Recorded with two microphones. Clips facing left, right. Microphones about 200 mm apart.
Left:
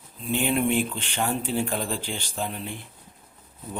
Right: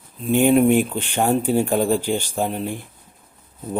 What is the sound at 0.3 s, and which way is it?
Speech, 50° right (ahead or behind).